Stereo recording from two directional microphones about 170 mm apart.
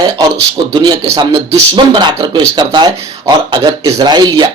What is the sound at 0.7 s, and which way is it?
Speech, 25° right (ahead or behind).